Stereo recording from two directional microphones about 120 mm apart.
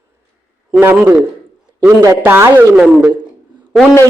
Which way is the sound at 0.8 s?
15° right (ahead or behind).